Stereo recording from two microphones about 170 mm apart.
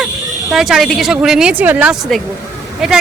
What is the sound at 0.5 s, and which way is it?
Speech, centre (ahead or behind).